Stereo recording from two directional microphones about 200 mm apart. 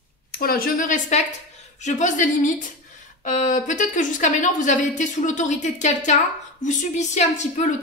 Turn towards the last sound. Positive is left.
turn(degrees=35)  # may be behind; listen again after turning